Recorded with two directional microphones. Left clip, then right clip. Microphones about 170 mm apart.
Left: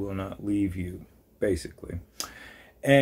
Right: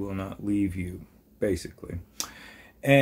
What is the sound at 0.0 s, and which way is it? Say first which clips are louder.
Speech: even; 20° right (ahead or behind).